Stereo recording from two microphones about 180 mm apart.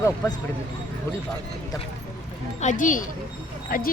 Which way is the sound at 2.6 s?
45° left (ahead or behind).